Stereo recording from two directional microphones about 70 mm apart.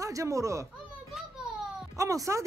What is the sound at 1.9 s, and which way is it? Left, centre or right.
Speech, right.